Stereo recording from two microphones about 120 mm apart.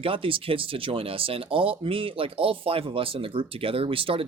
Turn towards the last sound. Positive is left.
turn(degrees=-50)  # may be behind; listen again after turning